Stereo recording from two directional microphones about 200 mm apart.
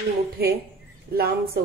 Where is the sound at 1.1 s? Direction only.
50° right (ahead or behind).